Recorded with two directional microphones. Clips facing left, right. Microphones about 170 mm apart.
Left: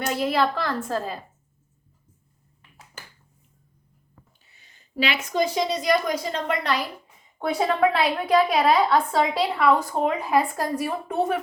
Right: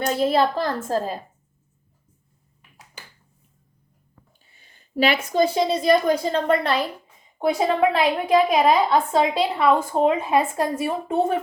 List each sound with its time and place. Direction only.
0.0 s a child's voice: 30° right (ahead or behind)
0.5 s a woman's voice: 40° right (ahead or behind)
4.5 s a sound: 50° right (ahead or behind)
5.1 s a woman's voice: 35° right (ahead or behind)